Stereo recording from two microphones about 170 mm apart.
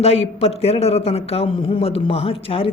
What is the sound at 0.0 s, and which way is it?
A man's voice, 35° left (ahead or behind).